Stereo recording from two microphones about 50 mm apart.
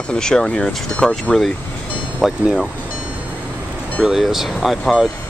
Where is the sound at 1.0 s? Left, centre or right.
Centre.